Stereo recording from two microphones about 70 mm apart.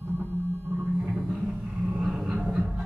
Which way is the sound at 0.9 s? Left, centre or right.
Centre.